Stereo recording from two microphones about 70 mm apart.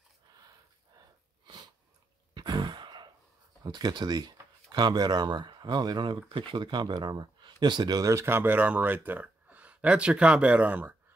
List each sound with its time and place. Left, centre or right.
2.3 s a sound: right
3.6 s speech: right
6.5 s speech: right
8.1 s speech: right